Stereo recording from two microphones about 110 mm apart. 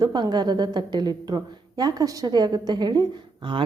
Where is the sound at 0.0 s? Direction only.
40° right (ahead or behind).